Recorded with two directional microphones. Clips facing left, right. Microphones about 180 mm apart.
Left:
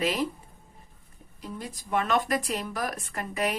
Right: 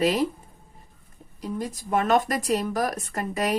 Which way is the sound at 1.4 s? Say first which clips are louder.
Right 7 dB; 40° right (ahead or behind).